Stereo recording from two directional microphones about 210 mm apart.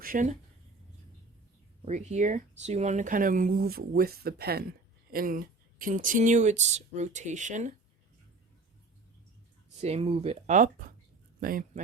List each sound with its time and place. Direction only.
0.0 s speech: 40° right (ahead or behind)
1.8 s speech: 35° right (ahead or behind)
9.8 s speech: 30° right (ahead or behind)